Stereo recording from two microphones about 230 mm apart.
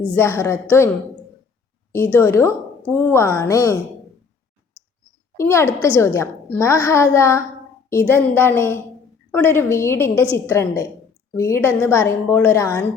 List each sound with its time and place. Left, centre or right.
0.2 s a woman's voice: centre
2.1 s a woman's voice: centre
5.4 s a woman's voice: centre